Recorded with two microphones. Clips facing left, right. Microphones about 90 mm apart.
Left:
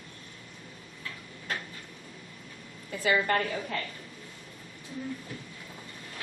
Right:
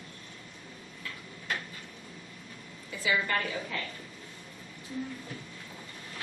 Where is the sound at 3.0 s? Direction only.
45° left (ahead or behind).